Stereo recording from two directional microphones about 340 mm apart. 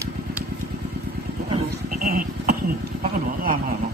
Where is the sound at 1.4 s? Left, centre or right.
Right.